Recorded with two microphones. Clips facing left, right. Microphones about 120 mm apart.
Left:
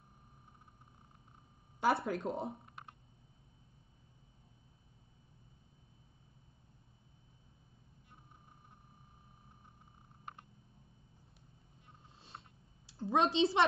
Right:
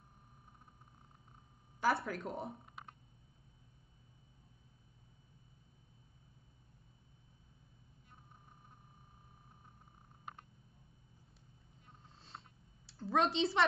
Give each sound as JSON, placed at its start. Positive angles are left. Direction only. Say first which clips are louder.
{"t": 1.8, "sound": "speech", "louder": "left 2 dB", "side_deg": 25}
{"t": 12.9, "sound": "a woman's voice", "louder": "left 2 dB", "side_deg": 20}